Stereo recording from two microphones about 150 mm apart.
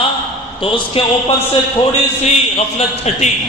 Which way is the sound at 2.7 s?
45° left (ahead or behind).